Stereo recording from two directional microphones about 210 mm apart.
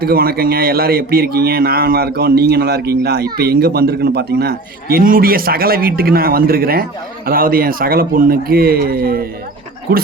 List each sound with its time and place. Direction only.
0.0 s speech: 45° right (ahead or behind)